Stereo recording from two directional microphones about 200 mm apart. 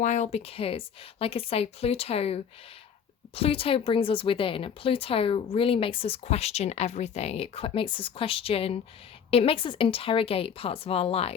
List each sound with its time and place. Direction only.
0.0 s speech: 35° left (ahead or behind)